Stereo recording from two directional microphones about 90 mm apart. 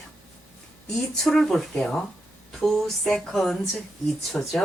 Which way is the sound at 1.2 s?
5° left (ahead or behind).